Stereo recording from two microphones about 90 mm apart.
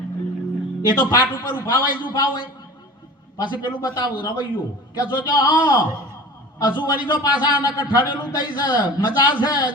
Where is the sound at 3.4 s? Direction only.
50° left (ahead or behind).